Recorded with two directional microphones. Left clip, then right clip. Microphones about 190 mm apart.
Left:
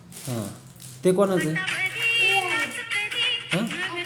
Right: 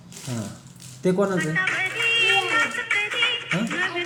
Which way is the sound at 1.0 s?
10° left (ahead or behind).